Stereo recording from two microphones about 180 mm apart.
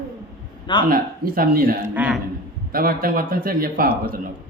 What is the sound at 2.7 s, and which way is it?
A man's voice, 55° right (ahead or behind).